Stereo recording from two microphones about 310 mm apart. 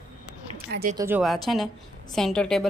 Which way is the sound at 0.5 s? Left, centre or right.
Right.